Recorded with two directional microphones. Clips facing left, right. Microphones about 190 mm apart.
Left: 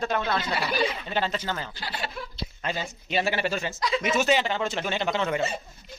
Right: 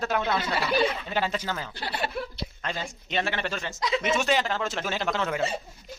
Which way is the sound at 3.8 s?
20° right (ahead or behind).